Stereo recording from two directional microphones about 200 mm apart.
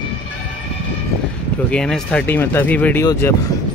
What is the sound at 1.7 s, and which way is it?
Speech, 5° left (ahead or behind).